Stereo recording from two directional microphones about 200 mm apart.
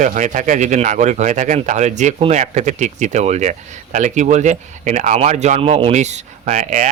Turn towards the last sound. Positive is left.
turn(degrees=-40)  # may be behind; listen again after turning